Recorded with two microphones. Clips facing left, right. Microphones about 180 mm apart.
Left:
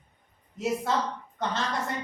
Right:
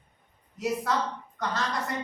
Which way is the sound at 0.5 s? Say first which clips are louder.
Even; 25° left (ahead or behind).